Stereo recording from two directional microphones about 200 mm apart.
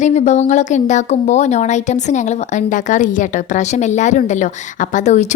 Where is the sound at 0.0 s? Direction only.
35° left (ahead or behind).